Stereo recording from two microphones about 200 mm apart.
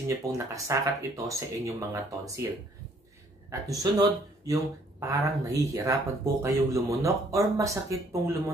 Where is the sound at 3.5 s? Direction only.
15° right (ahead or behind).